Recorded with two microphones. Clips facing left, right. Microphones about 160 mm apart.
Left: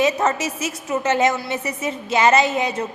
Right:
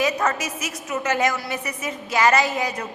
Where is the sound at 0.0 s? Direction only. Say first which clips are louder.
Left 3 dB; 25° left (ahead or behind).